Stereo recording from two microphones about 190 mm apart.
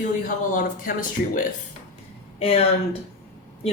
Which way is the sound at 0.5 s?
45° left (ahead or behind).